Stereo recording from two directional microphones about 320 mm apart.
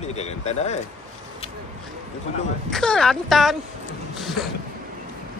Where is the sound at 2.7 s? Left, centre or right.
Centre.